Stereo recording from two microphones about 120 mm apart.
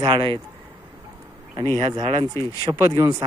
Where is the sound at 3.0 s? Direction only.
25° right (ahead or behind).